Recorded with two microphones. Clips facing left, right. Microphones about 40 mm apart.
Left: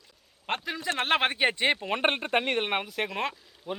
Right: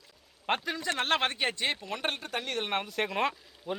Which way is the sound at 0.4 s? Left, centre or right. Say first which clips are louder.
Right 2 dB; centre.